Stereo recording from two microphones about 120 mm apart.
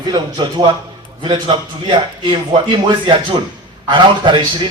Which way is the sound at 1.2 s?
50° right (ahead or behind).